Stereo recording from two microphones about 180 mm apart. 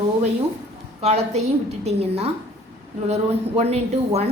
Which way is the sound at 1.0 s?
35° right (ahead or behind).